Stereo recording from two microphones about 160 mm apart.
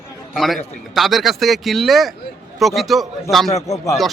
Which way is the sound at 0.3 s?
Centre (ahead or behind).